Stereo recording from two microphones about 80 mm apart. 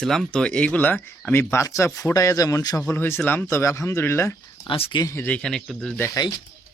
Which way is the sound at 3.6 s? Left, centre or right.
Left.